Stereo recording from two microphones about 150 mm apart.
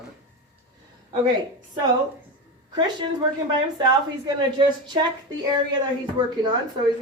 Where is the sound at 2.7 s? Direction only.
30° right (ahead or behind).